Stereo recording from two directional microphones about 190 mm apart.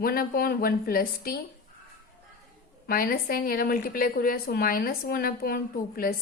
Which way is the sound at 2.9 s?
50° left (ahead or behind).